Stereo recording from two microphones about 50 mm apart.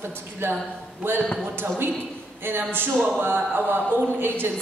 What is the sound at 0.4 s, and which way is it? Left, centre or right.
Speech, right.